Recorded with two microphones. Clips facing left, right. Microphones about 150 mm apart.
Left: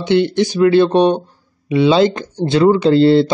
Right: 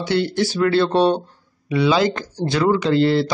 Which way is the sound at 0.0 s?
20° left (ahead or behind).